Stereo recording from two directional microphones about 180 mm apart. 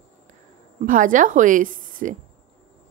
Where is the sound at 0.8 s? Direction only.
45° right (ahead or behind).